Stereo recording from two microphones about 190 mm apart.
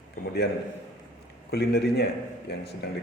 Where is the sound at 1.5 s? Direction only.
60° left (ahead or behind).